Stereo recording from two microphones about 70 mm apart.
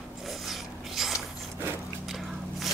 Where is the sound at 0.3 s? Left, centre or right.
Centre.